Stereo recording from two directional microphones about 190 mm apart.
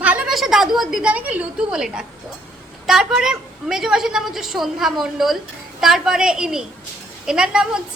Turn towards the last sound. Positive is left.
turn(degrees=-5)  # may be behind; listen again after turning